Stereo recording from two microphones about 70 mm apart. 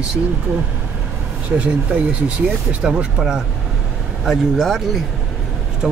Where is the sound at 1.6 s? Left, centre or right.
Centre.